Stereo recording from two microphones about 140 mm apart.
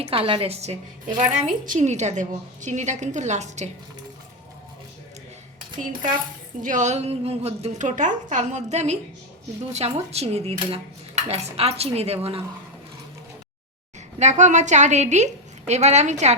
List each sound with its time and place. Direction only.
0.0 s dishes: 40° right (ahead or behind)
1.4 s a woman's voice: 65° right (ahead or behind)
6.6 s a woman's voice: 60° right (ahead or behind)
9.7 s dishes: 50° right (ahead or behind)
14.2 s a woman's voice: 55° right (ahead or behind)